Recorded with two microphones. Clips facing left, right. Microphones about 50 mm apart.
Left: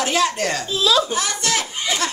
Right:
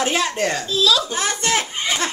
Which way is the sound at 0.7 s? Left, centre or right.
Left.